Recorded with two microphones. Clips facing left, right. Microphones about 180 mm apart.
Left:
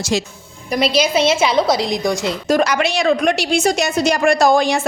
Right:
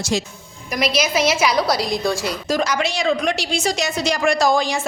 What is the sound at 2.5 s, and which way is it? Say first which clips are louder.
A woman's voice: left 5 dB; 60° left (ahead or behind).